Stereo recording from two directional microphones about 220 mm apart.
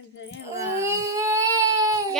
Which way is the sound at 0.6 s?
15° right (ahead or behind).